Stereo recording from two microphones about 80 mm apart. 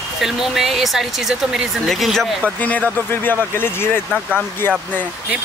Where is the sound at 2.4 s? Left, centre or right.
Centre.